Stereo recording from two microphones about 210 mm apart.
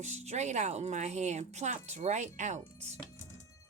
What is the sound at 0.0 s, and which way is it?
Speech, 30° right (ahead or behind).